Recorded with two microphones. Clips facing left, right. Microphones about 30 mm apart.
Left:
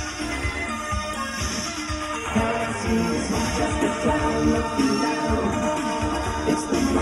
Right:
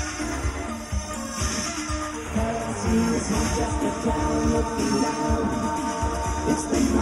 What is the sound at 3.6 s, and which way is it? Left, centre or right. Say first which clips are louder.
Music: left 3 dB; left.